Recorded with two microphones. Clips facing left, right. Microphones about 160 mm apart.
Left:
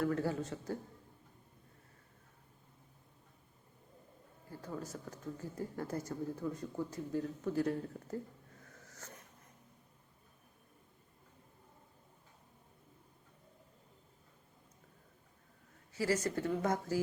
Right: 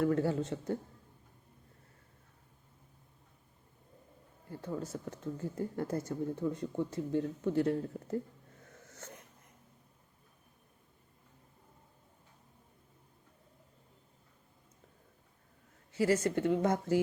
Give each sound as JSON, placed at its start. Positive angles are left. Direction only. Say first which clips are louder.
{"t": 0.0, "sound": "speech", "louder": "right 4 dB", "side_deg": -25}
{"t": 4.6, "sound": "speech", "louder": "right 5 dB", "side_deg": -25}
{"t": 8.9, "sound": "dog", "louder": "right 4 dB", "side_deg": -25}
{"t": 15.9, "sound": "speech", "louder": "right 5 dB", "side_deg": -25}